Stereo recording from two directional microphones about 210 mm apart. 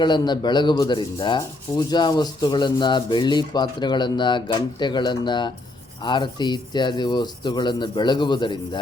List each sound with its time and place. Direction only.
0.0 s rub: 20° left (ahead or behind)